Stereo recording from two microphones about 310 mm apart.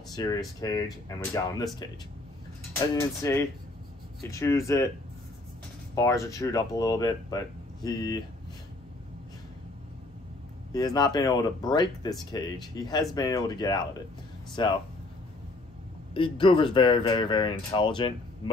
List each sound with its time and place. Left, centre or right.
0.1 s speech: centre
3.0 s speech: centre
5.9 s speech: centre
10.7 s speech: centre
16.2 s speech: centre